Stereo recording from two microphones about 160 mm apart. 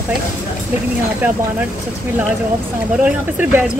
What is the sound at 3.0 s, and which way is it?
Speech, 10° right (ahead or behind).